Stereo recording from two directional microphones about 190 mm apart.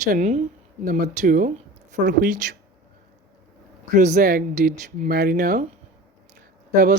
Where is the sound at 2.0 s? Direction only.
65° right (ahead or behind).